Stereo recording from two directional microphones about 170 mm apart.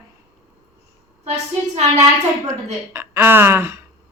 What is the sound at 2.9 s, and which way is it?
Speech, 15° right (ahead or behind).